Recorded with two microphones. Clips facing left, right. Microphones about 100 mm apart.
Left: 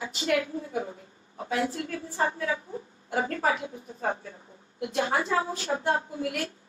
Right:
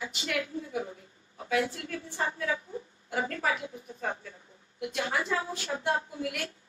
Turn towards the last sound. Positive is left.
turn(degrees=40)  # may be behind; listen again after turning